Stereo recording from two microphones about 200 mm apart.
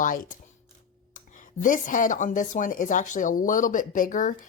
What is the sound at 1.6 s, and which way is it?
Speech, 40° left (ahead or behind).